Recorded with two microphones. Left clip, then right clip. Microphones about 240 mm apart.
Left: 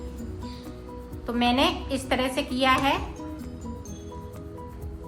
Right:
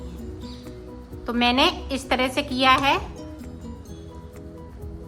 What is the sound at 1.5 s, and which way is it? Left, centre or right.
A woman's voice, centre.